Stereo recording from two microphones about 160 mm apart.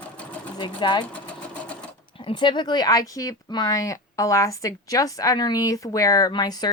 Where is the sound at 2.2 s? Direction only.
30° left (ahead or behind).